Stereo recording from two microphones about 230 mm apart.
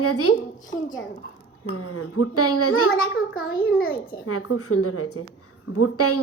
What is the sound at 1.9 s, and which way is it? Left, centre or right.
A woman's voice, left.